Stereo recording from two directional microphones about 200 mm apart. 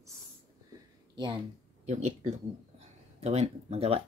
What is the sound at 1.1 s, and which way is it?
Speech, 25° right (ahead or behind).